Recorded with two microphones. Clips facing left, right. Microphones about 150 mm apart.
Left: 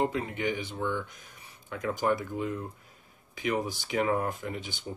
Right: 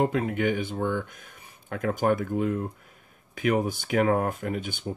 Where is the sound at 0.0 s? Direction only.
55° right (ahead or behind).